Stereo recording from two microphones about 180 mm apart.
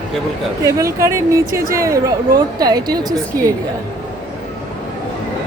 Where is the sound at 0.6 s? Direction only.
15° right (ahead or behind).